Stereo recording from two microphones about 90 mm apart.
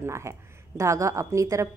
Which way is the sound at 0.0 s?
30° right (ahead or behind).